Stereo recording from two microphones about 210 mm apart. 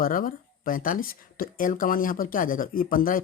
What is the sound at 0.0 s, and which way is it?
Speech, 40° left (ahead or behind).